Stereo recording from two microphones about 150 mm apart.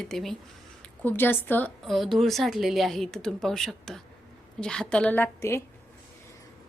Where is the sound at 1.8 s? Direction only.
Centre (ahead or behind).